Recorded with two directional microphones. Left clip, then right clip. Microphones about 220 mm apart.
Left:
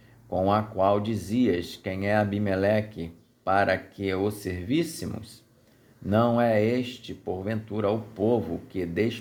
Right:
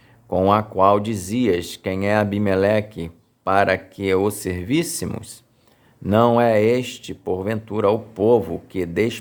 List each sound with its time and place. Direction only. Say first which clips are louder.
0.3 s speech: right 7 dB; 30° right (ahead or behind)